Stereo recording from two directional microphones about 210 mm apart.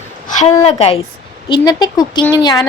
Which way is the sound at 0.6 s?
30° left (ahead or behind).